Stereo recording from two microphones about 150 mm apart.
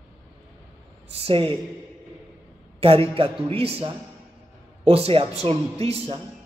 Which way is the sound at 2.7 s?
40° right (ahead or behind).